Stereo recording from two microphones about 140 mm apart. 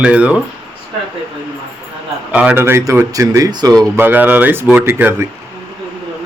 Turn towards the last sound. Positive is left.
turn(degrees=-15)  # may be behind; listen again after turning